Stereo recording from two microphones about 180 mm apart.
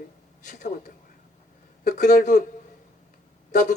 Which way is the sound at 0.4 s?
45° left (ahead or behind).